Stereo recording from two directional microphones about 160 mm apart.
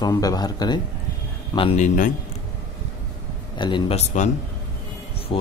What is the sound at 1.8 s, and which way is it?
Speech, 55° left (ahead or behind).